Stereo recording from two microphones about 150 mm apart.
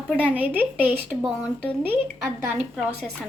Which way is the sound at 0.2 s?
10° right (ahead or behind).